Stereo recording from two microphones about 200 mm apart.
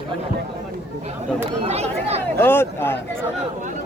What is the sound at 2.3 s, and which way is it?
Speech, 10° left (ahead or behind).